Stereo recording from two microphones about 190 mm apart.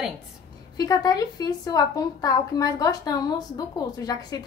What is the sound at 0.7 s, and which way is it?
A woman's voice, 20° left (ahead or behind).